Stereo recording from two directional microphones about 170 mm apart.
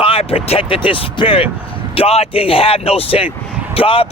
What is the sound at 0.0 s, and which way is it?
A man's voice, 35° left (ahead or behind).